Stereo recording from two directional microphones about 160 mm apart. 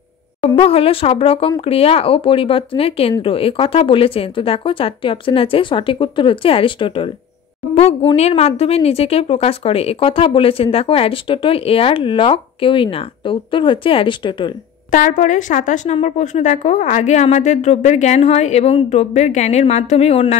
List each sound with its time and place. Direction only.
0.4 s a woman's voice: 35° left (ahead or behind)
14.9 s a woman's voice: 55° left (ahead or behind)